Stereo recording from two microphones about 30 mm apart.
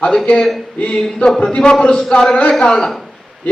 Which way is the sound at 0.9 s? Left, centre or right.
Left.